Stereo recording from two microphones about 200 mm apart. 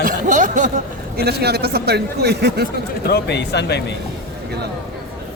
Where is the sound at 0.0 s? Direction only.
40° right (ahead or behind).